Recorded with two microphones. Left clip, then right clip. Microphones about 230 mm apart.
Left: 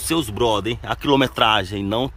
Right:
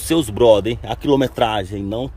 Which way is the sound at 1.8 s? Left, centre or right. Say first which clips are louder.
Left 2 dB; left.